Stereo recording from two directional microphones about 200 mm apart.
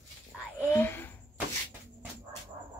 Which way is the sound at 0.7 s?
10° left (ahead or behind).